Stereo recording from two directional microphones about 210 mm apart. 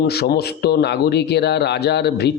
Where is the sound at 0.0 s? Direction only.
50° left (ahead or behind).